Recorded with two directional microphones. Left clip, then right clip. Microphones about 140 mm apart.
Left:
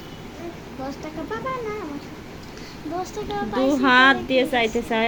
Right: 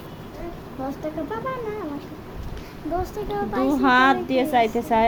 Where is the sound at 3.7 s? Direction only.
5° right (ahead or behind).